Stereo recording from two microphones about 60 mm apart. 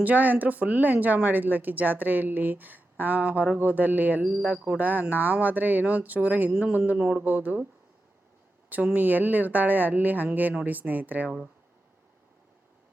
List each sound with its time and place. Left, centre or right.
0.0 s speech: right
6.5 s speech: centre
7.3 s speech: right
8.7 s speech: right